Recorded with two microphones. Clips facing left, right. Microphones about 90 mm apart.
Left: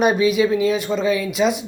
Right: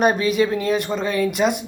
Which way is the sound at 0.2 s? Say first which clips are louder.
Left 3 dB; 45° right (ahead or behind).